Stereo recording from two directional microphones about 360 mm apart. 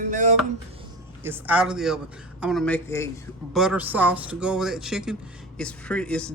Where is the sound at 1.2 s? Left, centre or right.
Centre.